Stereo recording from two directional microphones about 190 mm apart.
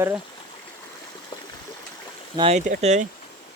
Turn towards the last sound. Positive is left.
turn(degrees=-35)  # may be behind; listen again after turning